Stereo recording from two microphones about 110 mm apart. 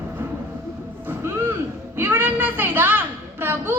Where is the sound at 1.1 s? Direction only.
20° right (ahead or behind).